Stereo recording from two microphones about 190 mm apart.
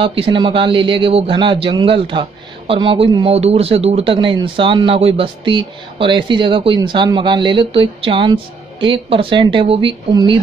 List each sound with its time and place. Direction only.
0.0 s a man's voice: 30° right (ahead or behind)